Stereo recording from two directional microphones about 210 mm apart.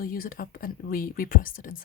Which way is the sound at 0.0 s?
45° left (ahead or behind).